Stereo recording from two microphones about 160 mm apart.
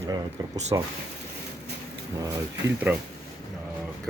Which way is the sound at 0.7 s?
20° right (ahead or behind).